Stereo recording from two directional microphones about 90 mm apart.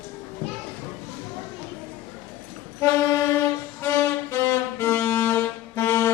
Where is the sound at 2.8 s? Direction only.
35° left (ahead or behind).